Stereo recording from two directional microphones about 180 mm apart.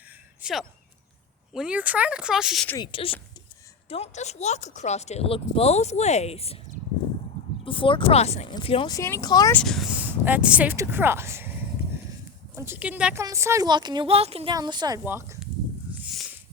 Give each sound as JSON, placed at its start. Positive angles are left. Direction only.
{"t": 0.4, "sound": "speech", "side_deg": -5}
{"t": 2.7, "sound": "speech", "side_deg": 30}
{"t": 7.6, "sound": "speech", "side_deg": 30}
{"t": 9.0, "sound": "speech", "side_deg": 15}
{"t": 9.5, "sound": "speech", "side_deg": 5}
{"t": 12.5, "sound": "a woman's voice", "side_deg": -10}
{"t": 14.5, "sound": "a woman's voice", "side_deg": -25}
{"t": 15.9, "sound": "a sound", "side_deg": -5}